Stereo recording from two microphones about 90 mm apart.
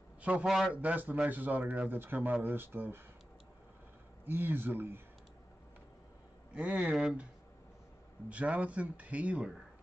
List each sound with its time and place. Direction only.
0.2 s a man's voice: 15° right (ahead or behind)
0.5 s a man's voice: 5° right (ahead or behind)
0.7 s speech: 15° right (ahead or behind)
4.3 s speech: 25° right (ahead or behind)
6.5 s speech: 15° right (ahead or behind)
8.3 s speech: 15° right (ahead or behind)